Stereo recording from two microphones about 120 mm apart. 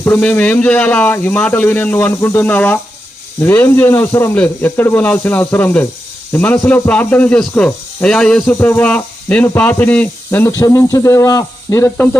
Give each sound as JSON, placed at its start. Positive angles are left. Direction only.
{"t": 0.2, "sound": "speech", "side_deg": 15}
{"t": 10.6, "sound": "speech", "side_deg": 25}